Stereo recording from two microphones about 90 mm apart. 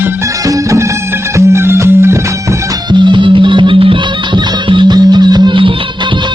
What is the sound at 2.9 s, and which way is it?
Music, 60° right (ahead or behind).